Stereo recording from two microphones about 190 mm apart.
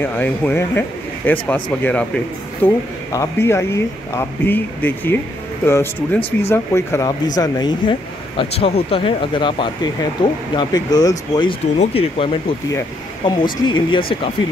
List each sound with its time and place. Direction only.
0.0 s speech: 10° left (ahead or behind)